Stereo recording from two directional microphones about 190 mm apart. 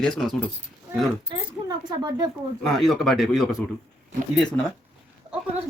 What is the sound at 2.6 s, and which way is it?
Speech, centre (ahead or behind).